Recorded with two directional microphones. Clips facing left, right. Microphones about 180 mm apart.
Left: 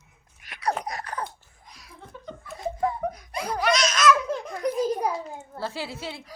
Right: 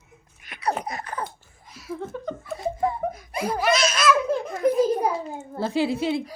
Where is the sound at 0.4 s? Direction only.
Centre (ahead or behind).